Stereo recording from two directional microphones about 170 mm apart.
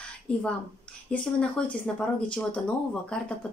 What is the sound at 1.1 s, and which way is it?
Speech, 5° left (ahead or behind).